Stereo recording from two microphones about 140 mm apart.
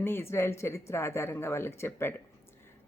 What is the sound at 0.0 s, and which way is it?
A woman's voice, 15° left (ahead or behind).